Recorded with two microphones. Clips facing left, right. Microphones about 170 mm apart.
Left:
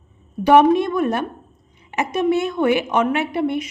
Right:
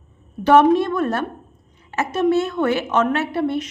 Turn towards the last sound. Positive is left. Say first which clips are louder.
# even
turn(degrees=15)  # may be behind; listen again after turning